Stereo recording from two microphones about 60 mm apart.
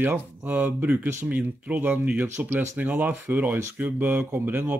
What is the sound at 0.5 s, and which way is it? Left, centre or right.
Speech, right.